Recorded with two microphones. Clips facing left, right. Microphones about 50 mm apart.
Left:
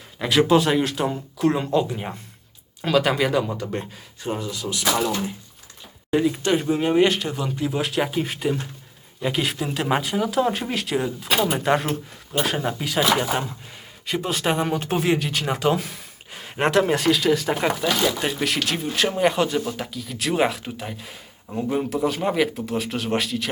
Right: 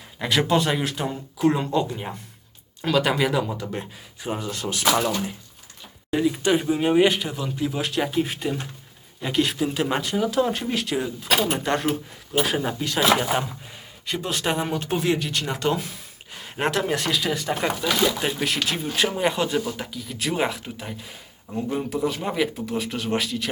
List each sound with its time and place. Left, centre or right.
0.2 s speech: centre
4.2 s speech: centre
4.4 s speech: right
6.1 s speech: centre
6.4 s speech: centre
11.9 s speech: centre
14.8 s speech: centre